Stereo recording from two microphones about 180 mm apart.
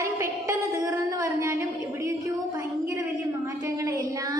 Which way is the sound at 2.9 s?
15° right (ahead or behind).